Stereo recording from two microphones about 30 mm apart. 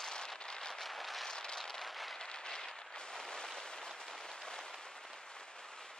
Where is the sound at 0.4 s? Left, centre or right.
Left.